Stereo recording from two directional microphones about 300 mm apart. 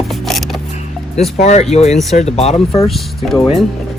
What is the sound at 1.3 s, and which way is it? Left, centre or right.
Music, left.